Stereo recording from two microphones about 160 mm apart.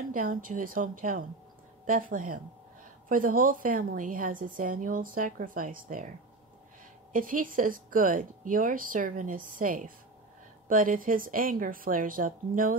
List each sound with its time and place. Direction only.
0.1 s a woman's voice: 60° right (ahead or behind)
7.1 s a woman's voice: 60° right (ahead or behind)